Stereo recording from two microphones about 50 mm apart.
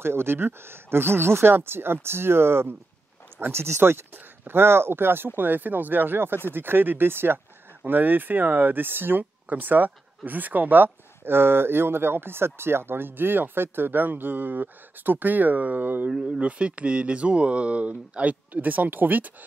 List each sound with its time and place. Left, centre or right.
0.0 s speech: right
16.1 s speech: centre; by 19.3 s right